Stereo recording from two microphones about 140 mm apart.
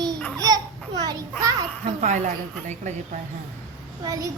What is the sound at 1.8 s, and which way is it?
A woman's voice, 60° right (ahead or behind).